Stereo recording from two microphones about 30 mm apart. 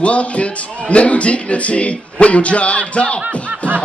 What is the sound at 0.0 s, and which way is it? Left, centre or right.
A man's voice, left.